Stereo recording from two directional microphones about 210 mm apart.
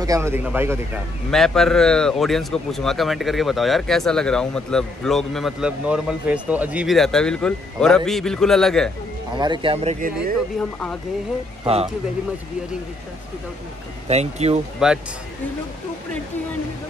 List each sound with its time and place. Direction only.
0.0 s speech: 15° right (ahead or behind)
1.3 s speech: centre (ahead or behind)
9.3 s speech: 20° right (ahead or behind)
11.6 s speech: 30° right (ahead or behind)
14.0 s speech: 30° right (ahead or behind)
14.8 s speech: centre (ahead or behind)